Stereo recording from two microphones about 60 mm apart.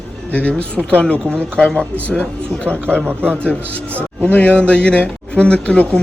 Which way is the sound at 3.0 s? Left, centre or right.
Right.